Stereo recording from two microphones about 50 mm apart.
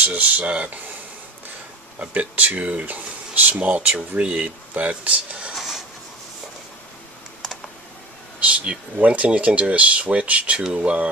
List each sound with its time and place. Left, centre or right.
0.0 s speech: right
2.0 s speech: right
5.5 s a sound: centre
8.5 s speech: right